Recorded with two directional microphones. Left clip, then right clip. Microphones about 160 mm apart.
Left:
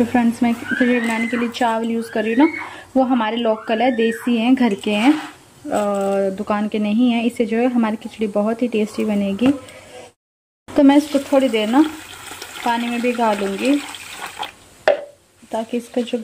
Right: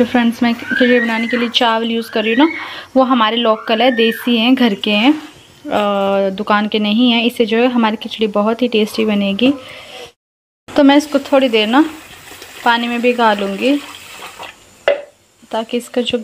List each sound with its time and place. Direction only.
0.0 s a woman's voice: centre (ahead or behind)
10.7 s a woman's voice: 5° left (ahead or behind)
15.5 s a woman's voice: 5° left (ahead or behind)